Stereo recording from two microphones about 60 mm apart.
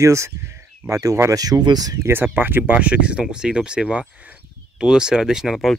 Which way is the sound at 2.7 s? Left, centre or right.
Right.